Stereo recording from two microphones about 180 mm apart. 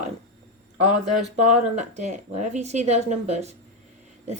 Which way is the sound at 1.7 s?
40° right (ahead or behind).